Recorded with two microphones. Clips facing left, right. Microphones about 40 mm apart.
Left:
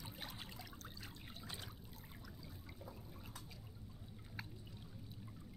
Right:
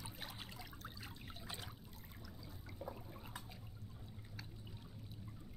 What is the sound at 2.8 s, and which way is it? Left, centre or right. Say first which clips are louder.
Water: right 7 dB; right.